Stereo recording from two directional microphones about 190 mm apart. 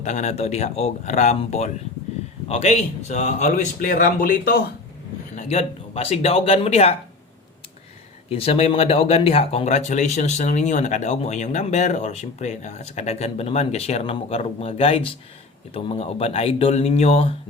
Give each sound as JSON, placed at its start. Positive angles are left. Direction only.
{"t": 0.0, "sound": "speech", "side_deg": 35}
{"t": 5.4, "sound": "speech", "side_deg": 35}
{"t": 8.3, "sound": "speech", "side_deg": 30}